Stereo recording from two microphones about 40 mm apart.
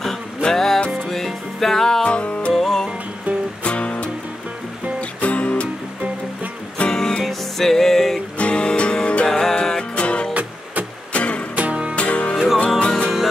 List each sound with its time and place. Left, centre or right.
0.4 s music: centre
2.0 s music: left
2.5 s music: centre
3.6 s music: left
5.2 s music: left
6.9 s music: centre
8.4 s music: left
9.4 s music: centre
9.9 s music: left
10.3 s music: right
11.1 s music: left
11.5 s music: right
11.9 s music: left